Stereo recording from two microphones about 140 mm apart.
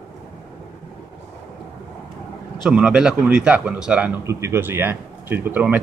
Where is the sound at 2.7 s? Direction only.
5° right (ahead or behind).